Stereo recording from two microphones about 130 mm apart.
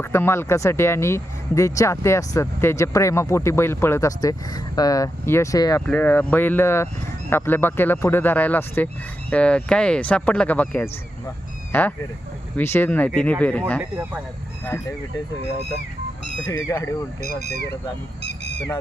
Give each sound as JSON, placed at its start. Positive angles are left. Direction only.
{"t": 0.0, "sound": "speech", "side_deg": 20}
{"t": 5.8, "sound": "speech", "side_deg": 15}
{"t": 13.9, "sound": "speech", "side_deg": -20}
{"t": 16.5, "sound": "speech", "side_deg": 25}